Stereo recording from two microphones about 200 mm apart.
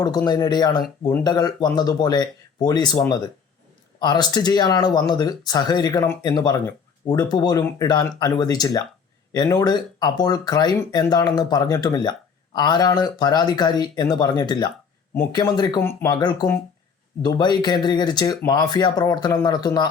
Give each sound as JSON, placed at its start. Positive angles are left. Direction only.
{"t": 0.3, "sound": "speech", "side_deg": 20}
{"t": 4.0, "sound": "speech", "side_deg": 20}